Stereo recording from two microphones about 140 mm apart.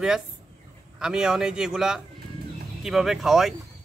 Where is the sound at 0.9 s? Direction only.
5° right (ahead or behind).